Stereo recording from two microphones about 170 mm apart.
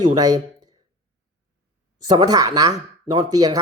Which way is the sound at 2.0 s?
25° right (ahead or behind).